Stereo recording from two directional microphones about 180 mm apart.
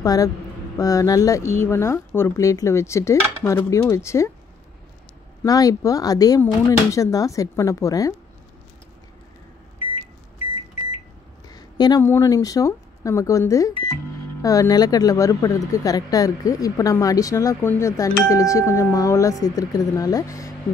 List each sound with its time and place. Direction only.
0.0 s speech: 20° left (ahead or behind)
5.4 s speech: 20° left (ahead or behind)
11.4 s speech: 20° left (ahead or behind)